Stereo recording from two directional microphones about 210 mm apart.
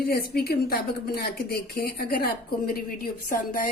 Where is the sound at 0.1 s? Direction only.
45° left (ahead or behind).